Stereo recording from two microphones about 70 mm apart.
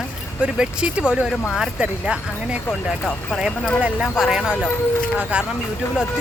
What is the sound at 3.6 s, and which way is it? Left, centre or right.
Speech, centre.